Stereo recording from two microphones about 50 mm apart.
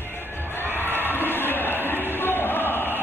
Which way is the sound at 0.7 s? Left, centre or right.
Right.